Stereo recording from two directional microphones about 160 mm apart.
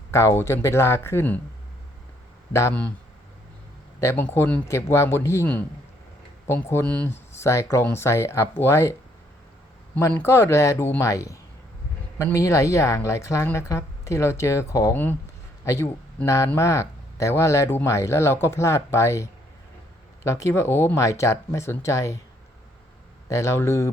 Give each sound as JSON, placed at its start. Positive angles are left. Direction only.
{"t": 0.1, "sound": "speech", "side_deg": 15}
{"t": 2.5, "sound": "speech", "side_deg": 15}
{"t": 4.0, "sound": "speech", "side_deg": 15}
{"t": 23.3, "sound": "speech", "side_deg": 15}